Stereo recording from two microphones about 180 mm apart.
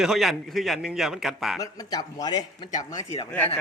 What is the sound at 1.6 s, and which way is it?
A man's voice, 20° left (ahead or behind).